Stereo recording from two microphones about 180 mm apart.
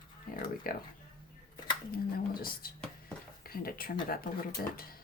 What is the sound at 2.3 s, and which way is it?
Speech, 55° left (ahead or behind).